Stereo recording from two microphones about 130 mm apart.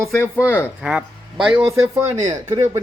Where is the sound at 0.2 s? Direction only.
20° left (ahead or behind).